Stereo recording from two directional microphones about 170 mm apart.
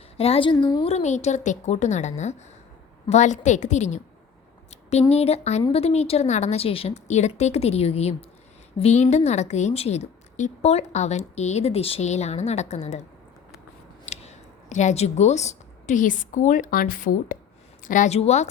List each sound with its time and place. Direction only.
0.2 s a woman's voice: 35° left (ahead or behind)
0.9 s a woman's voice: 40° left (ahead or behind)
14.0 s a woman's voice: 40° left (ahead or behind)